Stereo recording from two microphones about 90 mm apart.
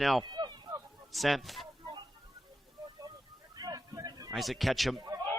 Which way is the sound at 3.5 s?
45° right (ahead or behind).